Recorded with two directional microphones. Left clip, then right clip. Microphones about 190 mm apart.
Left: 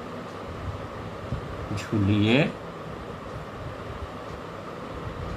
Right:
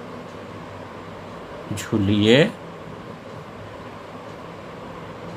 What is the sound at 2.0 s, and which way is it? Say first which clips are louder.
Speech: right 7 dB; 50° right (ahead or behind).